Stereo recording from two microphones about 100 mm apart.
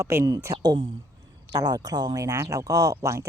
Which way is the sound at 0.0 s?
30° right (ahead or behind).